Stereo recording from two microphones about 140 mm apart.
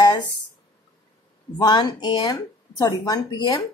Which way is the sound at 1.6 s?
30° left (ahead or behind).